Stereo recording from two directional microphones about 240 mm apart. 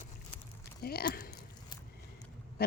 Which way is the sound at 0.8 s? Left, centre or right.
Left.